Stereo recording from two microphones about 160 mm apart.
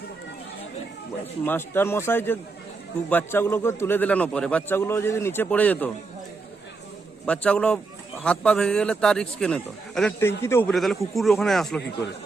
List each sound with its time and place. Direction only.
1.5 s a man's voice: 15° left (ahead or behind)
7.3 s a man's voice: 5° left (ahead or behind)
10.2 s a man's voice: 15° left (ahead or behind)
10.7 s a man's voice: centre (ahead or behind)